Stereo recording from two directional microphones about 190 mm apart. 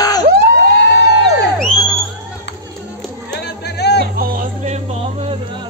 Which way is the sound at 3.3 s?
60° left (ahead or behind).